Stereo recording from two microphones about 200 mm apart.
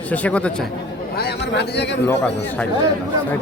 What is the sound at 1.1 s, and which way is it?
Speech, 55° left (ahead or behind).